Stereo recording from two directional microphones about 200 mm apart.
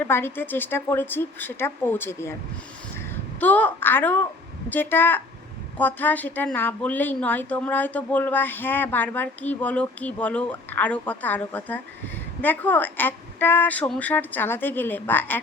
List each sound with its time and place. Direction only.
0.0 s a woman's voice: 10° left (ahead or behind)
3.4 s a woman's voice: 10° left (ahead or behind)